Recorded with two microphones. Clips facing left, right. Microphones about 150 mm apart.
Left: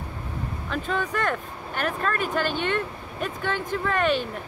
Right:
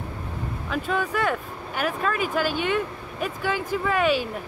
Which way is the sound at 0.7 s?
5° right (ahead or behind).